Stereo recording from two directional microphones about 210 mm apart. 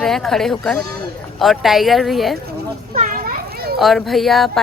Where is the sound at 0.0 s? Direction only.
Centre (ahead or behind).